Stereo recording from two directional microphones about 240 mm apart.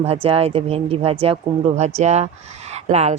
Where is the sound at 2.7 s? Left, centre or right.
Right.